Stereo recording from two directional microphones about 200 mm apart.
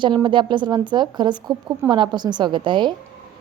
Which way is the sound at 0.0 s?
25° right (ahead or behind).